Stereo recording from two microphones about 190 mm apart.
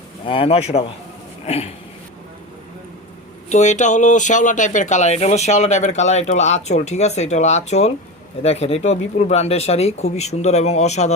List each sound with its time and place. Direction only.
0.3 s speech: 30° left (ahead or behind)
3.5 s speech: 40° left (ahead or behind)